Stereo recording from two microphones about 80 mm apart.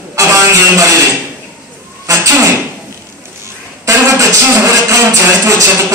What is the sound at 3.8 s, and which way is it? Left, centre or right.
Music, right.